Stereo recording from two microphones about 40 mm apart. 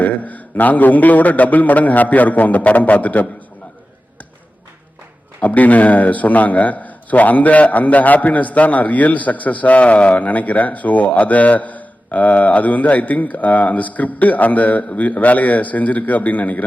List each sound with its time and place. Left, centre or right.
0.0 s a man's voice: left
5.4 s a man's voice: left